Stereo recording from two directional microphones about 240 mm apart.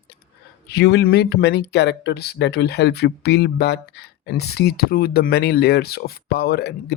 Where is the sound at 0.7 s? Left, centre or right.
Left.